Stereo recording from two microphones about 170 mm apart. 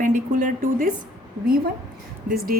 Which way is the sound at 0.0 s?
50° right (ahead or behind).